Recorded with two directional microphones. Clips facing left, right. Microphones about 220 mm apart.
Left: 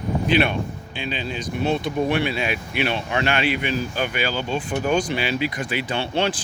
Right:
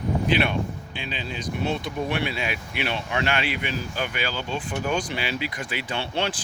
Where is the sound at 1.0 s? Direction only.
65° left (ahead or behind).